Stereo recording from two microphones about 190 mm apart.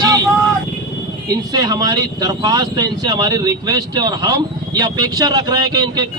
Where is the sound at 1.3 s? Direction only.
20° right (ahead or behind).